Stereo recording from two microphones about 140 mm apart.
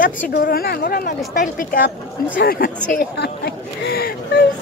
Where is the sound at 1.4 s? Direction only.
75° left (ahead or behind).